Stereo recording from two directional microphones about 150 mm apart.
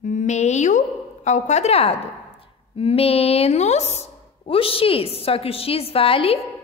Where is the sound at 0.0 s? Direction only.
55° left (ahead or behind).